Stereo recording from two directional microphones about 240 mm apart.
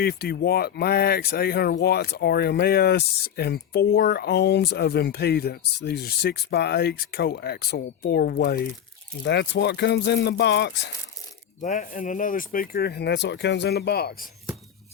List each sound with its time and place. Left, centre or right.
0.0 s speech: left
11.6 s speech: left